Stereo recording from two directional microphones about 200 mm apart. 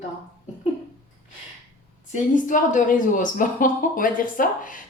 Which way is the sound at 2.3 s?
40° left (ahead or behind).